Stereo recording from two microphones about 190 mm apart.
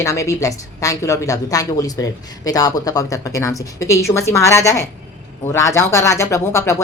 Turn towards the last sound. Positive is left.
turn(degrees=15)  # may be behind; listen again after turning